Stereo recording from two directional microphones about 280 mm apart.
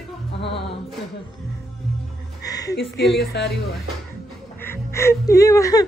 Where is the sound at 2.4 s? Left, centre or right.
Centre.